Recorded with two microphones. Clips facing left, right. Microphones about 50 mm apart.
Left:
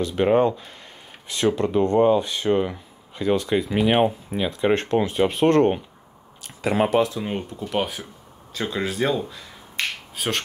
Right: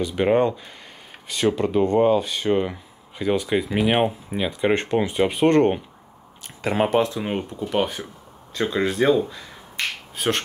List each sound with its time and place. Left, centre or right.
0.0 s speech: centre
6.4 s a sound: right
6.9 s speech: right
7.2 s speech: centre